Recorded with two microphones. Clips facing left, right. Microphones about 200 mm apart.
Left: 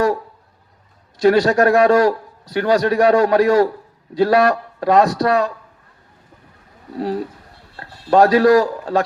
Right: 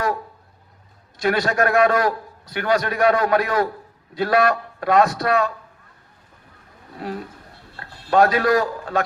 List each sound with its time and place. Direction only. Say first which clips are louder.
1.2 s a man's voice: left 7 dB; 40° left (ahead or behind)
6.9 s a man's voice: left 8 dB; 35° left (ahead or behind)